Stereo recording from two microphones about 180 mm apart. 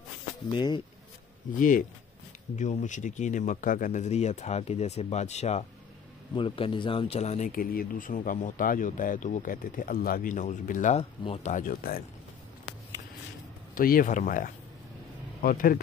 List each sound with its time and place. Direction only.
0.6 s speech: 25° left (ahead or behind)
1.6 s speech: 50° left (ahead or behind)
13.7 s speech: 50° left (ahead or behind)